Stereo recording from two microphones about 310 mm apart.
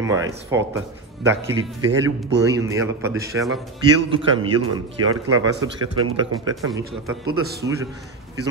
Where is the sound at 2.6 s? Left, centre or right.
Centre.